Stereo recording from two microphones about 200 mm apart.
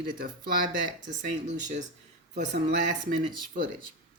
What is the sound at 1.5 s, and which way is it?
Speech, 35° right (ahead or behind).